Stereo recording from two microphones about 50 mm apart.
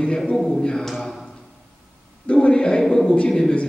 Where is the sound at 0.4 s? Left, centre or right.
Centre.